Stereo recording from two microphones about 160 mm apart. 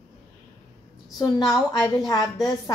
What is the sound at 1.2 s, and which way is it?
A woman's voice, 25° left (ahead or behind).